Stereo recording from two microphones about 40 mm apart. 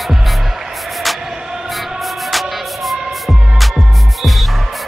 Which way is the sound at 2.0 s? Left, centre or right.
Centre.